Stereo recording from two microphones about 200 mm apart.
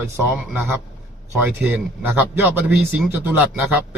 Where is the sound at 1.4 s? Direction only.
10° right (ahead or behind).